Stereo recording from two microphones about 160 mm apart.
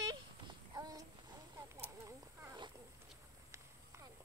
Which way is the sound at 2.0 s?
20° right (ahead or behind).